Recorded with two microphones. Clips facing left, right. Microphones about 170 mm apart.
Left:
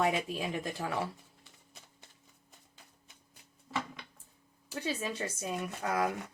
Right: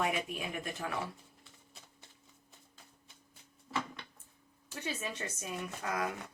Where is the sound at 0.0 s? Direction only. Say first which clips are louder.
Left 4 dB; 30° left (ahead or behind).